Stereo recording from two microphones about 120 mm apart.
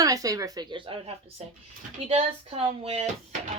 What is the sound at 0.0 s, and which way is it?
Speech, 30° right (ahead or behind).